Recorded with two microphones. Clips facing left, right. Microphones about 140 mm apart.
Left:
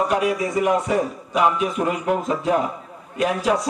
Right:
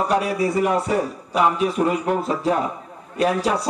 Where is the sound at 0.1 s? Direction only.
35° right (ahead or behind).